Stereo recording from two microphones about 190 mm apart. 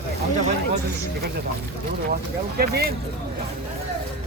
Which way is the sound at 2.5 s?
55° right (ahead or behind).